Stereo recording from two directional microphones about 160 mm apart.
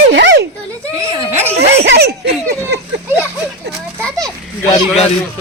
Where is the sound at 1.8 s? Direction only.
90° right.